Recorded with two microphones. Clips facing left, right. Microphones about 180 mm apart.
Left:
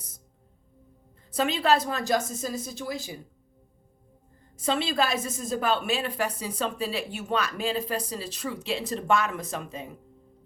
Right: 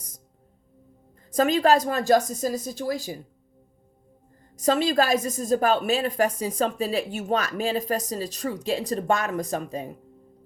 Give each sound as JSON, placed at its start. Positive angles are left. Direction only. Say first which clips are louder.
{"t": 1.3, "sound": "a woman's voice", "louder": "right 4 dB", "side_deg": -45}
{"t": 4.5, "sound": "a woman's voice", "louder": "right 5 dB", "side_deg": -45}